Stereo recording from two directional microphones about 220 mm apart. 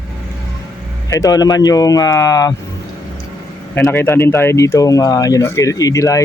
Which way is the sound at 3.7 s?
10° left (ahead or behind).